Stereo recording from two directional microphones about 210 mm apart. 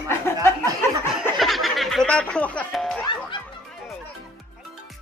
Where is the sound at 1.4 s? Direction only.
Centre (ahead or behind).